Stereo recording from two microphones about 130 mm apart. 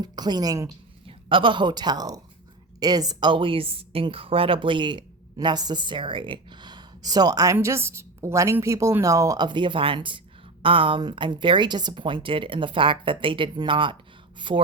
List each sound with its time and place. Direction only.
0.0 s speech: 30° right (ahead or behind)
1.0 s speech: 40° right (ahead or behind)